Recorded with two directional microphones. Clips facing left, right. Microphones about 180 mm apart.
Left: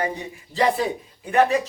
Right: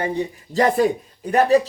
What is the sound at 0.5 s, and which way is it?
A man's voice, 45° right (ahead or behind).